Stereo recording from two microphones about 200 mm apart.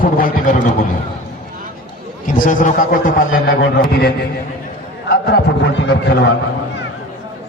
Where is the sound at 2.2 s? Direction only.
40° left (ahead or behind); by 6.3 s 60° left (ahead or behind).